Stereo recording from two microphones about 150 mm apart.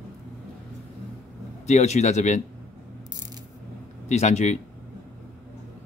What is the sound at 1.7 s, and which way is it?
Speech, 50° left (ahead or behind).